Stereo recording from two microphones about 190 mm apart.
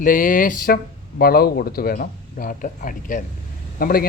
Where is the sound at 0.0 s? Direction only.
45° left (ahead or behind).